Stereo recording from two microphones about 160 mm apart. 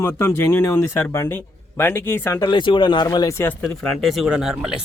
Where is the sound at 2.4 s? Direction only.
30° left (ahead or behind).